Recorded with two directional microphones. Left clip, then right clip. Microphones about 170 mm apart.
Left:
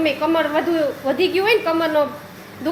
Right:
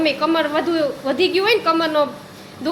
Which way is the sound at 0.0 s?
5° right (ahead or behind).